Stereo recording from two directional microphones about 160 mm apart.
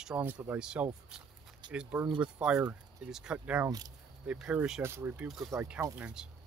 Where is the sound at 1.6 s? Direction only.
30° right (ahead or behind).